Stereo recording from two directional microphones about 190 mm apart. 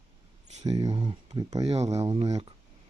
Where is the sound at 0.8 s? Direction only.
20° right (ahead or behind).